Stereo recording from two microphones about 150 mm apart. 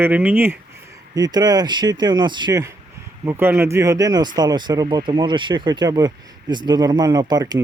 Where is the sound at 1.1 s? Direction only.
25° right (ahead or behind).